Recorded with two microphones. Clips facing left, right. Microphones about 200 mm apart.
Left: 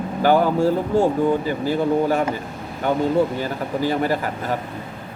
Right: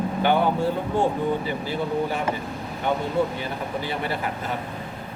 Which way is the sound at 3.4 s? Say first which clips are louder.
Left 6 dB; 40° left (ahead or behind).